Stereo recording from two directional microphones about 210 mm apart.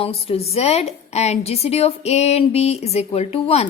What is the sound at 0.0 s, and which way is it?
Speech, 25° left (ahead or behind).